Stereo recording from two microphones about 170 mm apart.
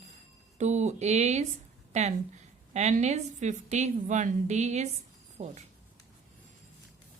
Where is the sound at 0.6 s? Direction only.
45° right (ahead or behind).